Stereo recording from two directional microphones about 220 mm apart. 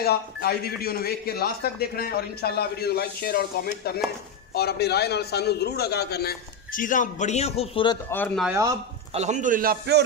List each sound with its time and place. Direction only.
0.0 s a man's voice: 45° left (ahead or behind); by 8.0 s 20° left (ahead or behind)
8.1 s speech: 10° left (ahead or behind)
8.5 s speech: 15° right (ahead or behind)
9.1 s a man's voice: 30° right (ahead or behind)